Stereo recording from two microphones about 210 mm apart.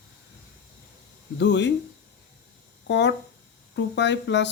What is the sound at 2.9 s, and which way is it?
Speech, 55° left (ahead or behind).